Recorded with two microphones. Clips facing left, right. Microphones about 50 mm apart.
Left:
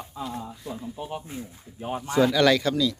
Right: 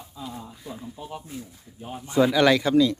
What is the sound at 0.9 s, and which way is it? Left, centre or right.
Speech, left.